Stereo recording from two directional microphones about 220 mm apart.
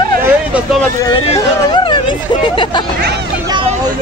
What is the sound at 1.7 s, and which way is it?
Speech, 20° left (ahead or behind).